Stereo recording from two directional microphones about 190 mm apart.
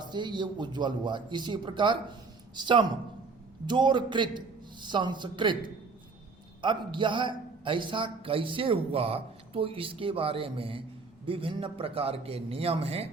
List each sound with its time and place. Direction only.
0.0 s a man's voice: 25° right (ahead or behind)